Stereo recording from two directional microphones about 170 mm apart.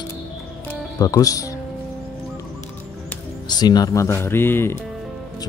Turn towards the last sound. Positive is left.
turn(degrees=15)  # may be behind; listen again after turning